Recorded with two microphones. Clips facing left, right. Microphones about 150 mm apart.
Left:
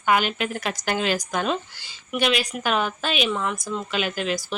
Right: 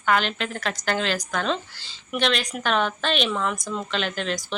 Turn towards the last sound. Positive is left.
turn(degrees=5)  # may be behind; listen again after turning